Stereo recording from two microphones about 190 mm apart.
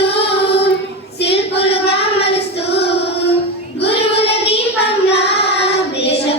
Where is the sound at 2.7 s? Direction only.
60° left (ahead or behind).